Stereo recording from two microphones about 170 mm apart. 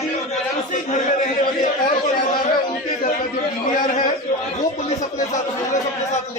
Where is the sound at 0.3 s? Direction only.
45° left (ahead or behind).